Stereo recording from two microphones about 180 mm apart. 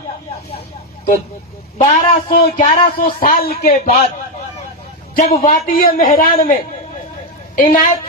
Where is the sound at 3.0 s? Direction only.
55° left (ahead or behind).